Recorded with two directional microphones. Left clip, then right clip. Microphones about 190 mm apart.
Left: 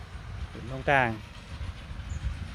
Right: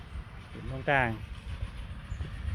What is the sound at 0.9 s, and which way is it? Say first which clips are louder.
Speech: left 3 dB; 5° left (ahead or behind).